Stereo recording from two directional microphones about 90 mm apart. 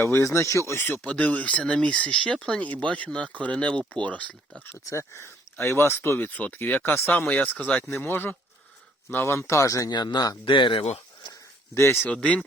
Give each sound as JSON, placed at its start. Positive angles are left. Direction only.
{"t": 0.0, "sound": "speech", "side_deg": 30}
{"t": 1.0, "sound": "speech", "side_deg": 15}
{"t": 4.7, "sound": "speech", "side_deg": 30}
{"t": 9.9, "sound": "speech", "side_deg": 50}
{"t": 10.4, "sound": "speech", "side_deg": 70}
{"t": 11.7, "sound": "speech", "side_deg": 30}